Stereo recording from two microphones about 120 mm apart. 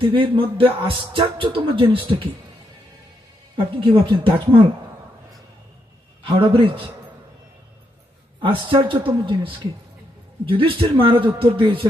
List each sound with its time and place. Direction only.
0.0 s speech: 45° right (ahead or behind)
3.5 s speech: 45° right (ahead or behind)
6.2 s speech: 45° right (ahead or behind)
8.4 s speech: 45° right (ahead or behind)